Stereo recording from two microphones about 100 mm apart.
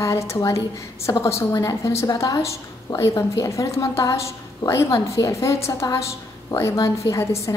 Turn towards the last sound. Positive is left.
turn(degrees=30)  # may be behind; listen again after turning